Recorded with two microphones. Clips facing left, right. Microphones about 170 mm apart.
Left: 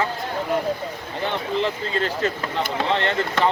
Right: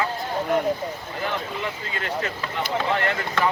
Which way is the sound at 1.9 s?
30° left (ahead or behind).